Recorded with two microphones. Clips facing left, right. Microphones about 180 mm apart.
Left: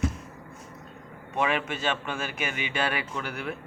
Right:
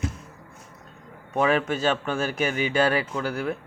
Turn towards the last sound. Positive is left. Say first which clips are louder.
# right 6 dB
turn(degrees=-35)  # may be behind; listen again after turning